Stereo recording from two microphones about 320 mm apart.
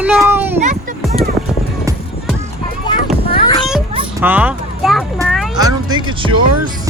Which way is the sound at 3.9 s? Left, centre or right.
Centre.